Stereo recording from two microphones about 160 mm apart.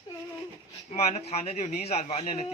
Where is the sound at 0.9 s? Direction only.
40° left (ahead or behind).